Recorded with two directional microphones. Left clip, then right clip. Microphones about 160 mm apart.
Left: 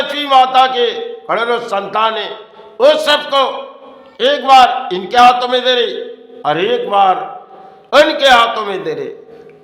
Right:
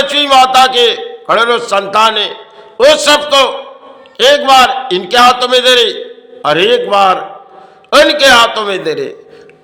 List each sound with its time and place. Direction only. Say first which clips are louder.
0.0 s a man's voice: right 3 dB; 20° right (ahead or behind)